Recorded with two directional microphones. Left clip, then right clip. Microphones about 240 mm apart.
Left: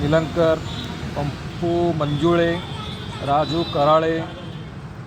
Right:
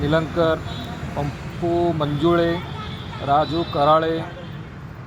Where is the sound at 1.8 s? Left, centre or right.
Centre.